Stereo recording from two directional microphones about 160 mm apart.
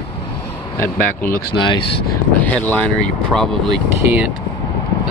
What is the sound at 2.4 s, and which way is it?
Speech, 10° left (ahead or behind).